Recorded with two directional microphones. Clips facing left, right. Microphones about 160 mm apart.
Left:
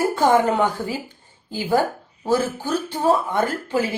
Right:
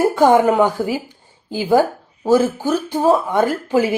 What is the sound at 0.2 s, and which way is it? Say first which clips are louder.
Speech: right 5 dB; 10° right (ahead or behind).